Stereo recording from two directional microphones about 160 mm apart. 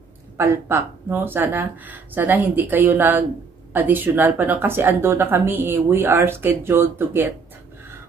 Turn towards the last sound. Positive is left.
turn(degrees=-15)  # may be behind; listen again after turning